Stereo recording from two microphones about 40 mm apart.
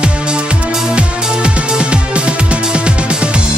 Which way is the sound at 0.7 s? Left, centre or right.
Centre.